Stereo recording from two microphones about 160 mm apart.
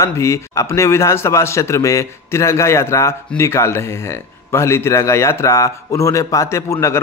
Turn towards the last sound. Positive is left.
turn(degrees=20)  # may be behind; listen again after turning